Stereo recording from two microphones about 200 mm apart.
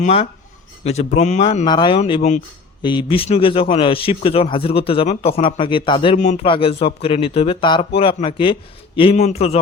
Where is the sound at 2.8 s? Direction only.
25° left (ahead or behind).